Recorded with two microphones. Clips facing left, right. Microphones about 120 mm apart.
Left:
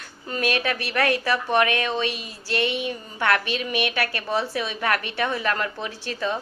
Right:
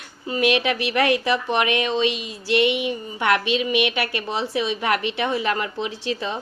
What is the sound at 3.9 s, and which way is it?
A woman's voice, 20° right (ahead or behind).